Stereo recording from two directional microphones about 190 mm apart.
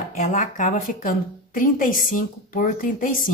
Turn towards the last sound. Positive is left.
turn(degrees=45)  # may be behind; listen again after turning